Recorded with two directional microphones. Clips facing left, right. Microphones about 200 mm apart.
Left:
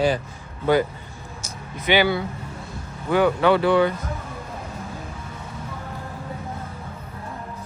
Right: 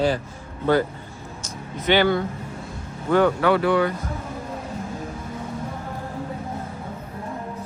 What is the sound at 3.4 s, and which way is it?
Speech, 25° left (ahead or behind).